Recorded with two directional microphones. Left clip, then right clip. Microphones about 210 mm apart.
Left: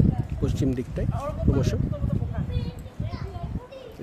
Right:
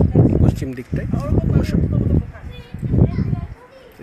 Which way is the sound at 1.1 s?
25° right (ahead or behind).